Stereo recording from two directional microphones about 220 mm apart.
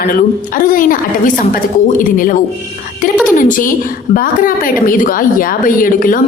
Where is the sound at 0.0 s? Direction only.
40° left (ahead or behind).